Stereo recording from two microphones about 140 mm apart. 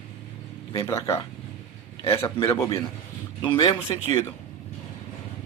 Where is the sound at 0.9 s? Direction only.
20° left (ahead or behind).